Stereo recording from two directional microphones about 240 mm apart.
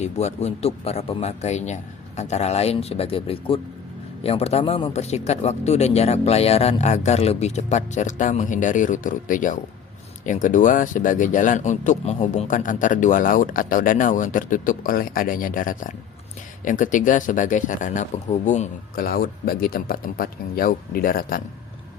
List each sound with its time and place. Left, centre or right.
0.0 s speech: left